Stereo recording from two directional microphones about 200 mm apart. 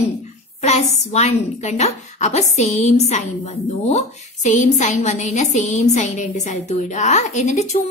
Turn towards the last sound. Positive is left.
turn(degrees=35)  # may be behind; listen again after turning